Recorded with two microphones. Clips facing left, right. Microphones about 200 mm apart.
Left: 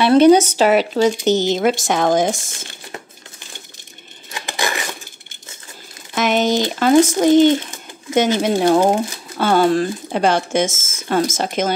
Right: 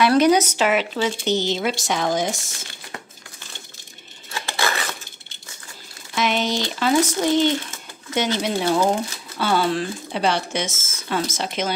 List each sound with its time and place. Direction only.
0.0 s speech: 30° left (ahead or behind); by 2.3 s 50° left (ahead or behind)
4.3 s scissors: 15° left (ahead or behind)
6.1 s speech: 50° left (ahead or behind)